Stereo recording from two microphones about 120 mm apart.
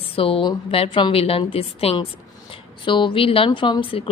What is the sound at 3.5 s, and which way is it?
Speech, 40° left (ahead or behind).